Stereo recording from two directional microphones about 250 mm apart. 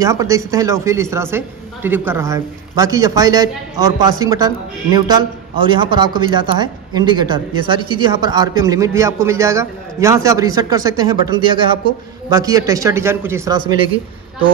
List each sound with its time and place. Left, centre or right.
0.0 s speech: centre